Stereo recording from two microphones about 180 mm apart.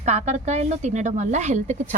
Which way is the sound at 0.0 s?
40° right (ahead or behind).